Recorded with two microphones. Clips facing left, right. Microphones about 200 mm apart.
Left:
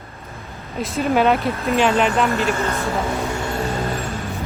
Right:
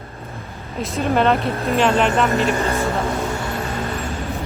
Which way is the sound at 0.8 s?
Centre (ahead or behind).